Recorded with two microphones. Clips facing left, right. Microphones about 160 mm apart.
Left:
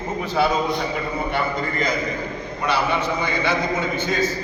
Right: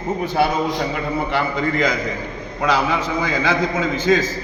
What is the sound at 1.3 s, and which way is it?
A man's voice, 90° right.